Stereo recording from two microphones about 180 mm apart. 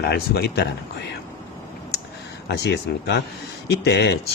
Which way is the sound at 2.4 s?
70° left (ahead or behind).